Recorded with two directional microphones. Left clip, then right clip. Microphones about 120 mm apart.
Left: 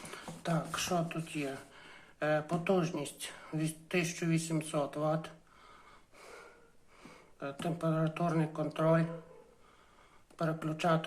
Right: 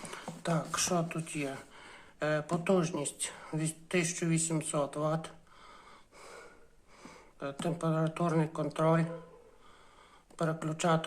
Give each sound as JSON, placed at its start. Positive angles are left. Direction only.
{"t": 0.1, "sound": "a woman's voice", "side_deg": -25}
{"t": 7.6, "sound": "a woman's voice", "side_deg": -25}
{"t": 10.3, "sound": "a woman's voice", "side_deg": -30}